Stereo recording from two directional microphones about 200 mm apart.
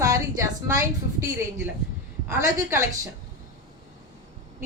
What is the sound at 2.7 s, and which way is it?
Speech, 15° right (ahead or behind).